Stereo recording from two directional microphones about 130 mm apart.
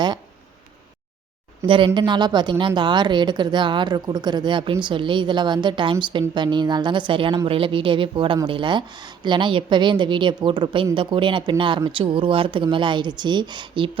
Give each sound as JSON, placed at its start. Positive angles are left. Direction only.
{"t": 1.6, "sound": "a woman's voice", "side_deg": -40}